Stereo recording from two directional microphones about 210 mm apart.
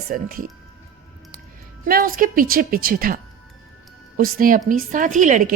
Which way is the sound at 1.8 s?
45° right (ahead or behind).